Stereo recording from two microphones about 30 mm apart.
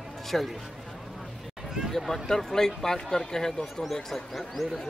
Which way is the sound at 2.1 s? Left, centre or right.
Centre.